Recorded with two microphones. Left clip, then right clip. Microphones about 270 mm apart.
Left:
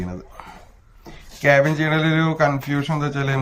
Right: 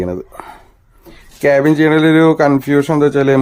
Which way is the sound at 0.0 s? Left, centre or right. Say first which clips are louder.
Right 12 dB; right.